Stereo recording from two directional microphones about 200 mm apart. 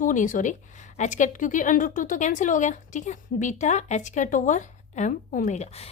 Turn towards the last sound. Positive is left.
turn(degrees=35)  # may be behind; listen again after turning